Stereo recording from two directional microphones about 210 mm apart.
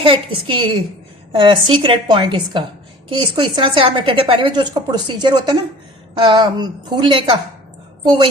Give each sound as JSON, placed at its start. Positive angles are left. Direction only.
{"t": 0.0, "sound": "a woman's voice", "side_deg": -25}